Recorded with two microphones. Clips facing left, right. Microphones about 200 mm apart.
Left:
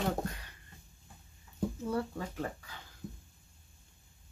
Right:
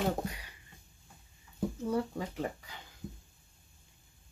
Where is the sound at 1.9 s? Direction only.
15° right (ahead or behind).